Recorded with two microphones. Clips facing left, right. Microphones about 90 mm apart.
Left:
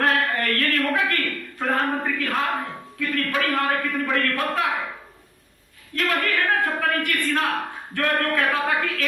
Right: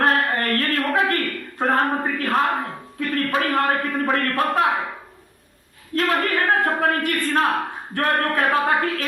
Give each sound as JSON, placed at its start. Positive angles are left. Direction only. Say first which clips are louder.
{"t": 0.0, "sound": "a sound", "louder": "right 2 dB", "side_deg": -35}
{"t": 3.0, "sound": "a man's voice", "louder": "right 2 dB", "side_deg": -35}
{"t": 6.1, "sound": "a man's voice", "louder": "right 2 dB", "side_deg": -30}